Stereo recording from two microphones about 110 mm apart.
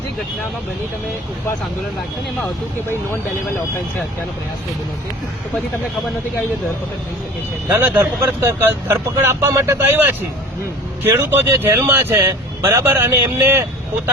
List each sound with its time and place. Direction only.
7.7 s speech: 25° right (ahead or behind)